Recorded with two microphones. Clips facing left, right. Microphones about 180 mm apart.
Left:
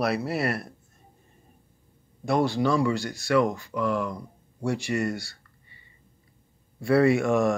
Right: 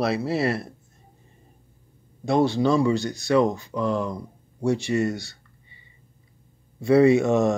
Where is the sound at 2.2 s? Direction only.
25° right (ahead or behind).